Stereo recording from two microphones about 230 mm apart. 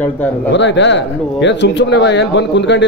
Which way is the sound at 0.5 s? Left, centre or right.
Left.